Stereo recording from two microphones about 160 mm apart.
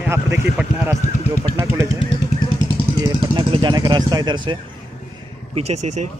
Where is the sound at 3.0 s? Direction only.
30° right (ahead or behind).